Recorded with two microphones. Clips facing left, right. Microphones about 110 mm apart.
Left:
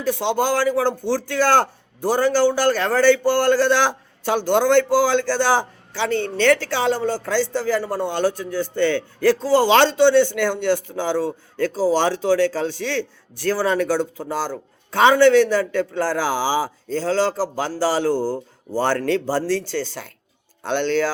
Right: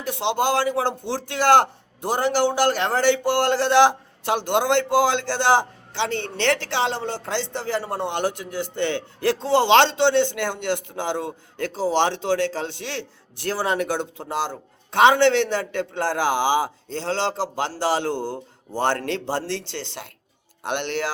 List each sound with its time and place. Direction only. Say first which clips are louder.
0.0 s speech: left 2 dB; 20° right (ahead or behind)